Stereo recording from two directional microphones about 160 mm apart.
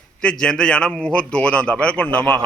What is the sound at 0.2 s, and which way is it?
A man's voice, 5° left (ahead or behind).